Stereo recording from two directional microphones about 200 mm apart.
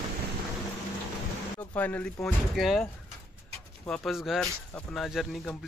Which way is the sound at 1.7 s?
10° left (ahead or behind).